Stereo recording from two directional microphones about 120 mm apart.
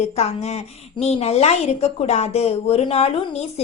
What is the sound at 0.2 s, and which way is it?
A woman's voice, 65° left (ahead or behind).